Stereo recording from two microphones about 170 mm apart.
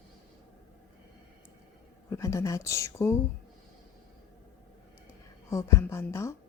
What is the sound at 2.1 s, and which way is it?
Speech, 20° left (ahead or behind).